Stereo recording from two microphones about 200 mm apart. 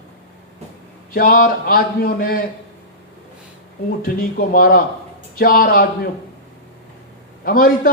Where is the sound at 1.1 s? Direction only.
45° left (ahead or behind).